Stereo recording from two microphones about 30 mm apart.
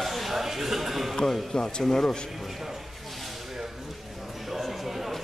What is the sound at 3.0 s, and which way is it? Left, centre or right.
Snake, centre.